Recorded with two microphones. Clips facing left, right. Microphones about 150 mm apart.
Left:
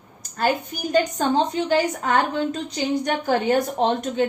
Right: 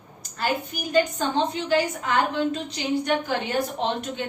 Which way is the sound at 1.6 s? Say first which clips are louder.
Left 2 dB; 45° left (ahead or behind).